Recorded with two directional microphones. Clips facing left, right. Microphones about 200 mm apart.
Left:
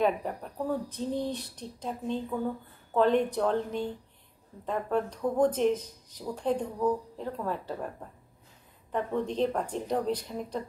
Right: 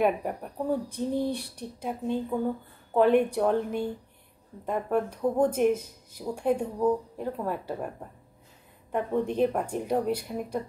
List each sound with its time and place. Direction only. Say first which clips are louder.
0.0 s speech: right 2 dB; 10° right (ahead or behind)
8.9 s speech: right 3 dB; 10° right (ahead or behind)